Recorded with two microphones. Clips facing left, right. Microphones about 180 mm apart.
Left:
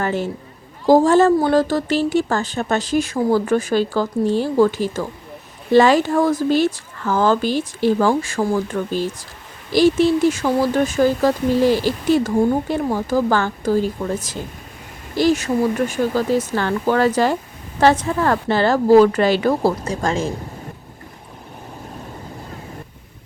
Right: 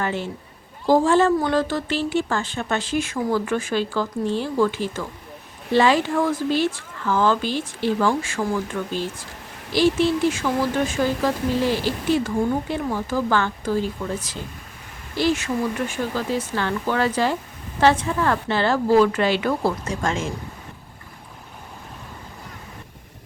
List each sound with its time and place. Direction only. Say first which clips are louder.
0.0 s a woman's voice: left 4 dB; 45° left (ahead or behind)